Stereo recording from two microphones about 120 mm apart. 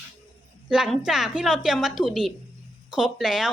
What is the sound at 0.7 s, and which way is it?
A woman's voice, 5° right (ahead or behind).